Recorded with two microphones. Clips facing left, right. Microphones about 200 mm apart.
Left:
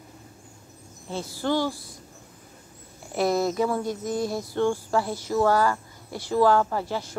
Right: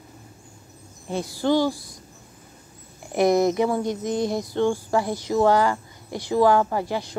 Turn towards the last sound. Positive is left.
turn(degrees=-15)  # may be behind; listen again after turning